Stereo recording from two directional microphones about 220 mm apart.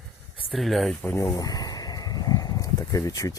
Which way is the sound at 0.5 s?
Centre (ahead or behind).